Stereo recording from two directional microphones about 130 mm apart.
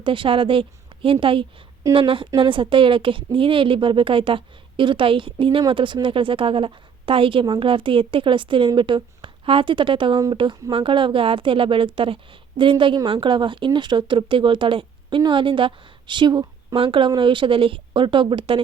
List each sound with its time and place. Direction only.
0.0 s a woman's voice: 40° right (ahead or behind)